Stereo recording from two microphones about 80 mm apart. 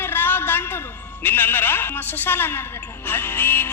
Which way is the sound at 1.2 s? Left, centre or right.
Left.